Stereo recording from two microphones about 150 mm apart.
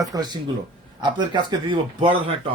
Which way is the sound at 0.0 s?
25° right (ahead or behind).